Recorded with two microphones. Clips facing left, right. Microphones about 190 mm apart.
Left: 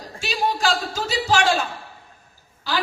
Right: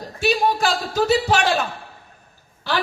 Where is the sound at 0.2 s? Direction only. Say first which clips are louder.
Right 4 dB; 60° right (ahead or behind).